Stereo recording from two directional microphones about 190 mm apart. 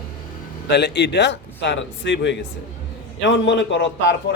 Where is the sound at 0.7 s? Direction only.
65° left (ahead or behind).